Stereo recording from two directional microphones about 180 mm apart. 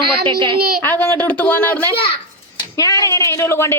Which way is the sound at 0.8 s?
10° left (ahead or behind).